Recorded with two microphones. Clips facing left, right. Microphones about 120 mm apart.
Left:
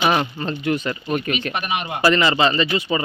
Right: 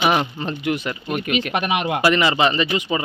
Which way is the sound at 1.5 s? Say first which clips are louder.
Right 4 dB; 85° right.